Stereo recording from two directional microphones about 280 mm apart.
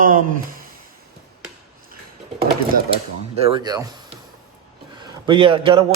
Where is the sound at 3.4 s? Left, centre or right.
Centre.